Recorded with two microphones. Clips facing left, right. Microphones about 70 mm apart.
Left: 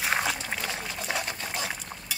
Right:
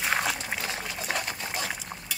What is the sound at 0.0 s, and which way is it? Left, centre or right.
Liquid, centre.